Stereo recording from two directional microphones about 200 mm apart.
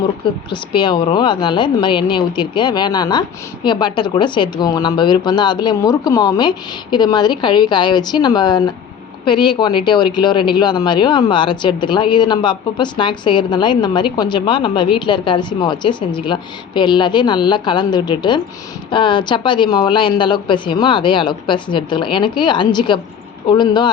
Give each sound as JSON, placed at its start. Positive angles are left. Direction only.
{"t": 0.5, "sound": "a woman's voice", "side_deg": 25}